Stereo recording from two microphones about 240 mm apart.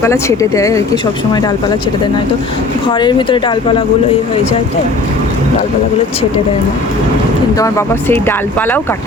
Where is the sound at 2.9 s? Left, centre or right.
Centre.